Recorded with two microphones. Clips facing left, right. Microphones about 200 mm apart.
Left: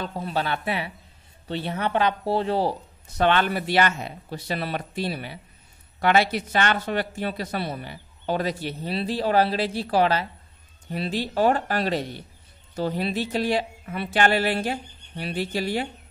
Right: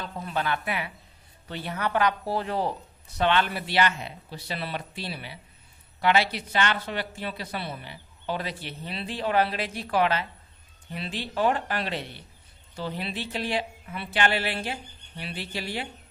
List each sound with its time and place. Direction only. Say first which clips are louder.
0.0 s speech: left 3 dB; 35° left (ahead or behind)
3.2 s a woman's voice: left 3 dB; 45° left (ahead or behind)